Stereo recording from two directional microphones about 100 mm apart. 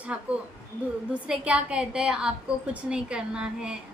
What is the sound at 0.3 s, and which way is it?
A woman's voice, 15° right (ahead or behind).